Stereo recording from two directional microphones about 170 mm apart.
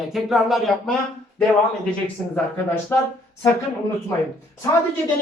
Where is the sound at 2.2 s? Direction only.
10° left (ahead or behind).